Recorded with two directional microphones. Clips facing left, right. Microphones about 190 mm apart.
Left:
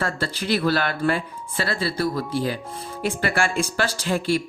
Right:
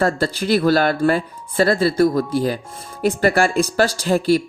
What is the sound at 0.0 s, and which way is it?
Speech, 40° right (ahead or behind).